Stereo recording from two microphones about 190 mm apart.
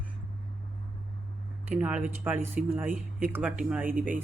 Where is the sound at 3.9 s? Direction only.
45° right (ahead or behind).